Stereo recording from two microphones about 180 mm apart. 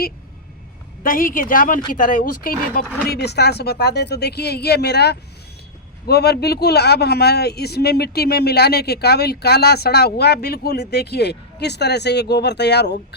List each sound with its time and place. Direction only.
1.0 s speech: 50° left (ahead or behind)
3.1 s speech: 65° left (ahead or behind)